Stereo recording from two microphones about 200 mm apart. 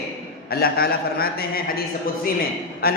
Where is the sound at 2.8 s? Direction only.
50° left (ahead or behind).